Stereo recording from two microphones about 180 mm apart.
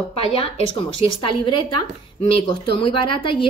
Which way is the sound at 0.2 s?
30° left (ahead or behind).